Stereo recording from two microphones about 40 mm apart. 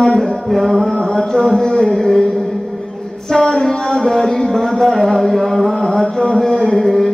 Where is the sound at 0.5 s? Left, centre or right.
Centre.